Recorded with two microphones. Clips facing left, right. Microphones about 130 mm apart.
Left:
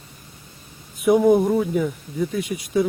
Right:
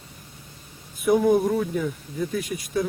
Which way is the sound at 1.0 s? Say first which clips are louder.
Left 3 dB; 5° left (ahead or behind).